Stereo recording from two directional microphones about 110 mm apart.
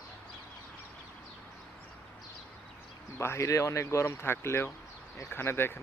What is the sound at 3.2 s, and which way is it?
Speech, 25° left (ahead or behind).